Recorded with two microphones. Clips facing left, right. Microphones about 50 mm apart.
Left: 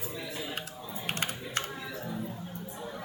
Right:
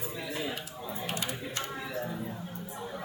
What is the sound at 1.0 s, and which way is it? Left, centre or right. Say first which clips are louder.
Typing: left 2 dB; left.